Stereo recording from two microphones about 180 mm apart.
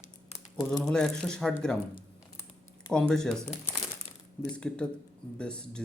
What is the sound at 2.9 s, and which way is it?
Speech, 5° left (ahead or behind).